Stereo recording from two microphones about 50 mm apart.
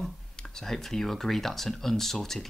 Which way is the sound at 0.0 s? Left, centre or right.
Centre.